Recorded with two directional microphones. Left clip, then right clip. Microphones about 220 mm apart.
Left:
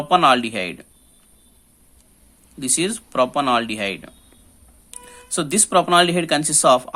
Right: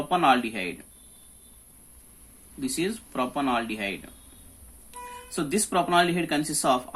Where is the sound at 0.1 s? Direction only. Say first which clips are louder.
Left 7 dB; 45° left (ahead or behind).